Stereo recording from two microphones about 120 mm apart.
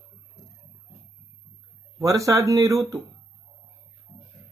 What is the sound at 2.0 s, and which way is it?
Speech, 25° right (ahead or behind).